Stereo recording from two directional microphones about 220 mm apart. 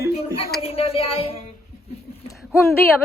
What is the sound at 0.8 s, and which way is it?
Speech, 25° left (ahead or behind).